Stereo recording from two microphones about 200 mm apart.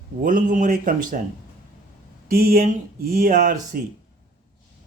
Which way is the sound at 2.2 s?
45° right (ahead or behind).